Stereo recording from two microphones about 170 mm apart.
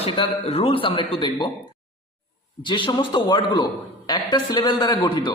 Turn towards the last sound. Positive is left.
turn(degrees=25)  # may be behind; listen again after turning